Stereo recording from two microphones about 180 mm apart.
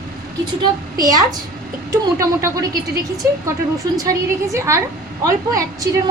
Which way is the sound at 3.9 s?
20° right (ahead or behind).